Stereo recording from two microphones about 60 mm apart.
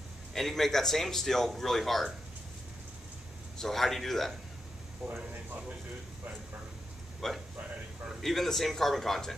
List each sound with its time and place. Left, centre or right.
0.3 s speech: centre
3.5 s speech: centre
5.0 s a man's voice: right
7.2 s speech: centre